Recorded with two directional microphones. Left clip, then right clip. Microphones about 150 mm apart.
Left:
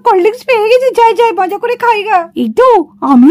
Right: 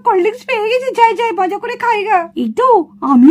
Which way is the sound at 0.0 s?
50° left (ahead or behind).